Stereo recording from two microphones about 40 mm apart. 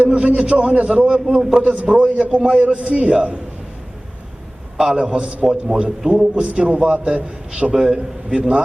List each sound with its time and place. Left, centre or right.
0.0 s a man's voice: right
1.6 s a man's voice: right
2.3 s a man's voice: right
4.8 s a man's voice: right
8.4 s a man's voice: right